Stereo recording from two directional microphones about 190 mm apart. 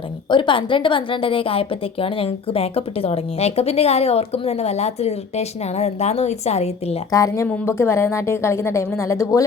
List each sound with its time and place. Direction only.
0.3 s a woman's voice: 25° left (ahead or behind)
7.1 s a woman's voice: 15° left (ahead or behind)